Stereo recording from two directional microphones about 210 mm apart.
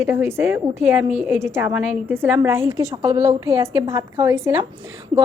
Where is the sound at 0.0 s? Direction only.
10° right (ahead or behind).